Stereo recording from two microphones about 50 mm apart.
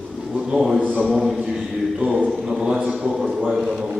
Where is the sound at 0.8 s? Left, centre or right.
Right.